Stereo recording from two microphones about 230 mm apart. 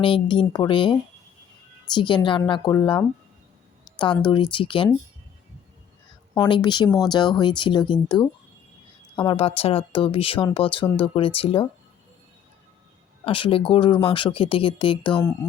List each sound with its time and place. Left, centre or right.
0.0 s speech: left
3.8 s a sound: left
4.3 s speech: left
6.3 s speech: centre
13.2 s speech: left